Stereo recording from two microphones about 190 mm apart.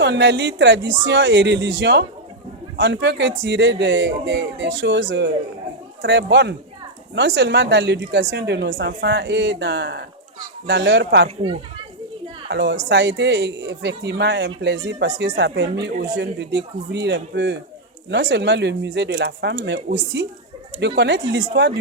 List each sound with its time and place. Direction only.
0.0 s a woman's voice: 65° right (ahead or behind)
12.5 s a woman's voice: 65° right (ahead or behind)